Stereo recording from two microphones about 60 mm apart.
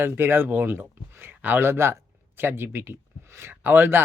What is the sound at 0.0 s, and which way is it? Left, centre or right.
A man's voice, right.